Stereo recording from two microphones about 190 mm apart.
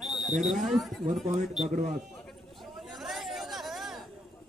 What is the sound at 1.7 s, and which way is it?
Speech, 40° right (ahead or behind).